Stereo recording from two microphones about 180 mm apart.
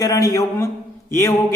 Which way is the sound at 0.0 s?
20° left (ahead or behind).